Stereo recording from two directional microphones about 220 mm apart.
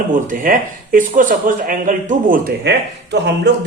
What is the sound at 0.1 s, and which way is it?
A man's voice, 35° right (ahead or behind).